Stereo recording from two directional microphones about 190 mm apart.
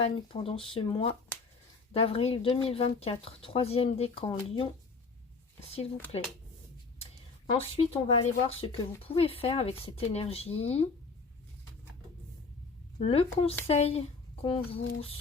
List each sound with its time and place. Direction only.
0.0 s speech: 30° left (ahead or behind)
7.4 s speech: 30° left (ahead or behind)
13.0 s speech: 30° left (ahead or behind)